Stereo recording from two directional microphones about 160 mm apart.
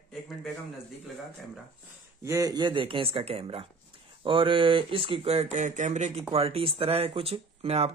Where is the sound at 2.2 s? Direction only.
20° right (ahead or behind).